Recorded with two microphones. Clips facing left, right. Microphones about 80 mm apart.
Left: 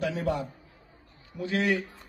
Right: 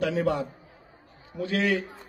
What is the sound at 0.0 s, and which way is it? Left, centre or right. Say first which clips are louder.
Speech: right 4 dB; right.